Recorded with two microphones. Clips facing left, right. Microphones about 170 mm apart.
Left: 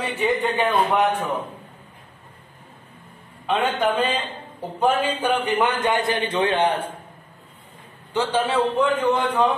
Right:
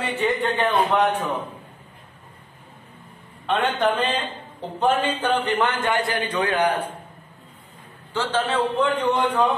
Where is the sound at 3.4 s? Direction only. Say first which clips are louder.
Even; 10° left (ahead or behind); by 6.7 s 25° left (ahead or behind).